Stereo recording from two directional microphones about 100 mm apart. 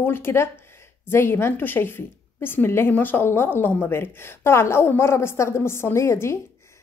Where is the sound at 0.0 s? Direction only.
20° left (ahead or behind).